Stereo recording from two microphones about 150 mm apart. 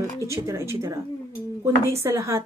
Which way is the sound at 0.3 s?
20° right (ahead or behind).